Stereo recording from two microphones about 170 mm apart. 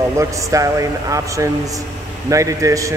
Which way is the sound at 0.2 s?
20° right (ahead or behind).